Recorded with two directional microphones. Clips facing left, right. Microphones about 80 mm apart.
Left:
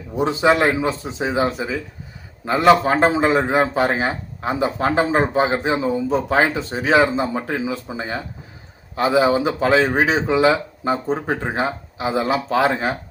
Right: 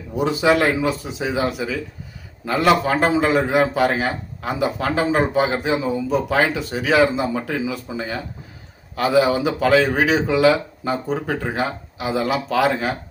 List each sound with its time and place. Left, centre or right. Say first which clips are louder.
0.2 s a man's voice: left 1 dB; left